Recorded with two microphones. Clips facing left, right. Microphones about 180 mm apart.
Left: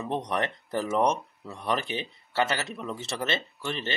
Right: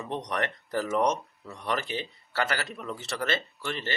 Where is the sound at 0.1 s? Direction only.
25° left (ahead or behind).